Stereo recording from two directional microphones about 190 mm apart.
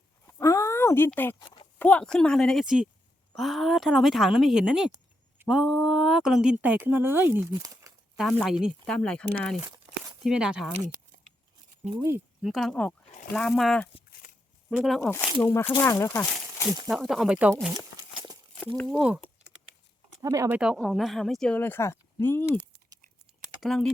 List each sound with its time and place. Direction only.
0.3 s dog: 15° left (ahead or behind)
1.8 s speech: 5° left (ahead or behind); by 7.9 s 15° right (ahead or behind)
8.1 s speech: centre (ahead or behind)
9.6 s crumpling: 15° right (ahead or behind)
10.2 s speech: 5° right (ahead or behind)
12.4 s speech: centre (ahead or behind)
15.4 s speech: 10° left (ahead or behind)
16.9 s speech: centre (ahead or behind)
18.8 s speech: centre (ahead or behind)
20.2 s speech: 15° right (ahead or behind)
20.6 s speech: centre (ahead or behind)
23.6 s speech: centre (ahead or behind)